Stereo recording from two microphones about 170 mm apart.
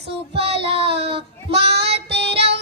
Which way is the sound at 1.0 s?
35° right (ahead or behind).